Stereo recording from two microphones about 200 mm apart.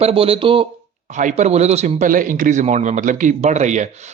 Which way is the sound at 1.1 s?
40° right (ahead or behind).